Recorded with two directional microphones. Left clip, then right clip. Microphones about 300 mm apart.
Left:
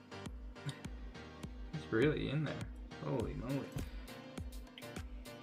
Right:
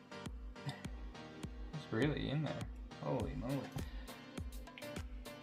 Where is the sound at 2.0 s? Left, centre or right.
Centre.